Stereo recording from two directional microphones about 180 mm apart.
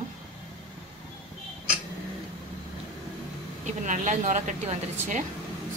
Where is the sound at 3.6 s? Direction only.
45° right (ahead or behind).